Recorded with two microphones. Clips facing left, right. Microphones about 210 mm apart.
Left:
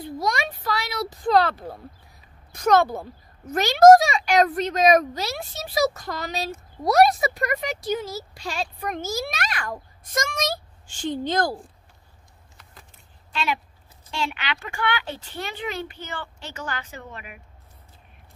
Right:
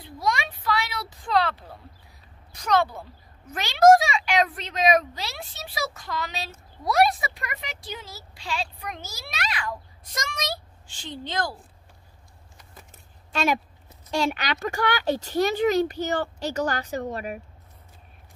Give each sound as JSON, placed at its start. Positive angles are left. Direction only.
{"t": 0.0, "sound": "a sound", "side_deg": 40}
{"t": 2.5, "sound": "speech", "side_deg": 50}
{"t": 13.3, "sound": "speech", "side_deg": -45}